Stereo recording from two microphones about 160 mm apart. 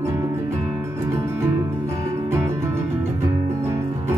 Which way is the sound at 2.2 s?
15° right (ahead or behind).